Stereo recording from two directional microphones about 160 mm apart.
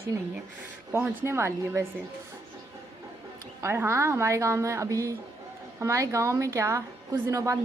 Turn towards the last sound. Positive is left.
turn(degrees=-20)  # may be behind; listen again after turning